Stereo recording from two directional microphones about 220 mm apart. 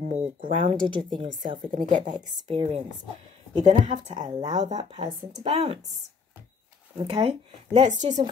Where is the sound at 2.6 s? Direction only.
25° right (ahead or behind).